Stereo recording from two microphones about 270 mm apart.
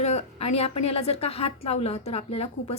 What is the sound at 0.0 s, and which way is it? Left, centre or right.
A woman's voice, left.